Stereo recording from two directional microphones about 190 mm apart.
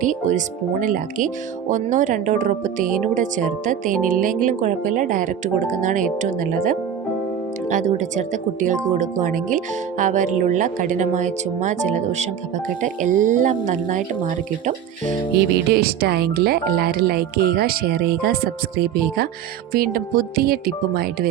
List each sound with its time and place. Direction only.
0.0 s speech: 40° right (ahead or behind)
5.8 s tuning fork: 40° right (ahead or behind)
7.7 s tuning fork: 40° right (ahead or behind)
15.4 s speech: 55° right (ahead or behind)